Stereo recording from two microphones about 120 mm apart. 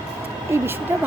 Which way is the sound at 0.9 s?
25° right (ahead or behind).